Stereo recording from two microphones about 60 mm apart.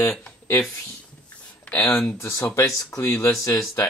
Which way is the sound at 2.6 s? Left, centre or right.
Left.